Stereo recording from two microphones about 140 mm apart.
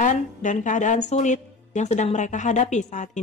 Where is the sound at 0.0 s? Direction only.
60° left (ahead or behind).